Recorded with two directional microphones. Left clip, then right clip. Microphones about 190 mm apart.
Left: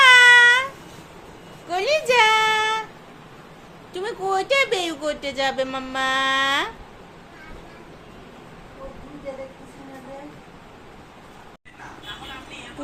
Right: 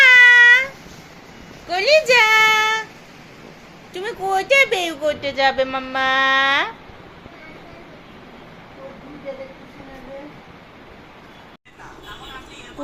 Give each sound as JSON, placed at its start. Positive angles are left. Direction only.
{"t": 0.0, "sound": "a sound", "side_deg": 15}
{"t": 3.9, "sound": "a woman's voice", "side_deg": 15}
{"t": 5.2, "sound": "a woman's voice", "side_deg": 25}